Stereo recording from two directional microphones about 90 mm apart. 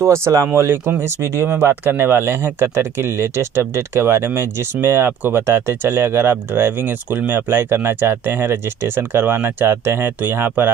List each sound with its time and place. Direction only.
0.0 s speech: 30° right (ahead or behind)